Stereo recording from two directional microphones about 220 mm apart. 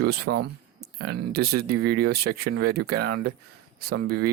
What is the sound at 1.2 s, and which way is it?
Speech, 45° right (ahead or behind).